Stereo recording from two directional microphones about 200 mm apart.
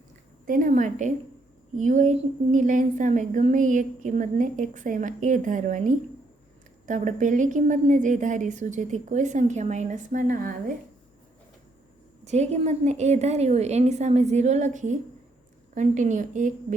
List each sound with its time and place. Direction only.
0.4 s a woman's voice: 45° right (ahead or behind)
12.2 s a woman's voice: 35° right (ahead or behind)